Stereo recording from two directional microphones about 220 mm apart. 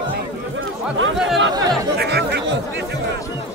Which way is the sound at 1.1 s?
Centre (ahead or behind).